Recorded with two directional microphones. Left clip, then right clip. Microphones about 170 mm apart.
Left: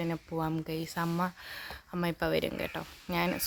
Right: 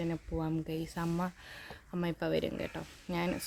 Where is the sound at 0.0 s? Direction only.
5° left (ahead or behind).